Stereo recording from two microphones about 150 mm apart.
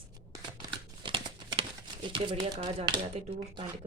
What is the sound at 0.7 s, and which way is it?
Crumpling, 30° right (ahead or behind).